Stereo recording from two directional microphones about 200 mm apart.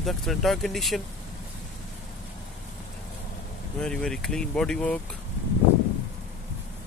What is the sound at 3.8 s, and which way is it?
Speech, 5° left (ahead or behind).